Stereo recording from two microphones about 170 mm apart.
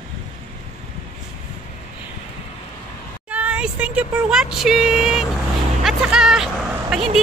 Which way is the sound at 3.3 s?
10° right (ahead or behind).